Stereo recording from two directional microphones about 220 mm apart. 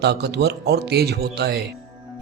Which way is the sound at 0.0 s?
50° right (ahead or behind).